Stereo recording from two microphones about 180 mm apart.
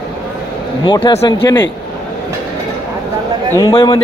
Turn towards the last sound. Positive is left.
turn(degrees=30)  # may be behind; listen again after turning